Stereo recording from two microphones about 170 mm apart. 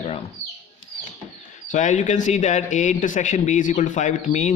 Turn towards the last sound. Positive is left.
turn(degrees=45)  # may be behind; listen again after turning